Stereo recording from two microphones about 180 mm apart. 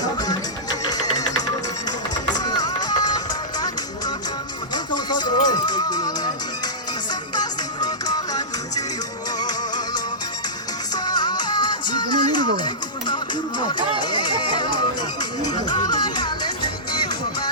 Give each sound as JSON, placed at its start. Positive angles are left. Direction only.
{"t": 0.0, "sound": "music", "side_deg": 20}
{"t": 2.2, "sound": "music", "side_deg": 20}
{"t": 4.7, "sound": "music", "side_deg": 25}